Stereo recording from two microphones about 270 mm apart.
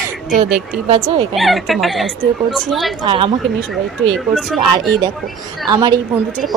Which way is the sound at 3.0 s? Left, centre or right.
Centre.